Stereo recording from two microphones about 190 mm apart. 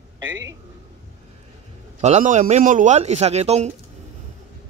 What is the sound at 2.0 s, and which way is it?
A man's voice, 40° right (ahead or behind).